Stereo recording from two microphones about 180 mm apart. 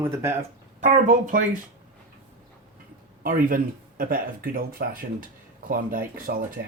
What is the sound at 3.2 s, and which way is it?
Speech, 50° right (ahead or behind).